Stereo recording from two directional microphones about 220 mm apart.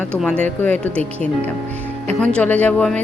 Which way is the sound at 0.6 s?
5° left (ahead or behind).